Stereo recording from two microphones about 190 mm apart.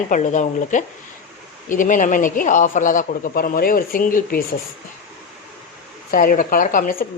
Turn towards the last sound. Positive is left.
turn(degrees=50)  # may be behind; listen again after turning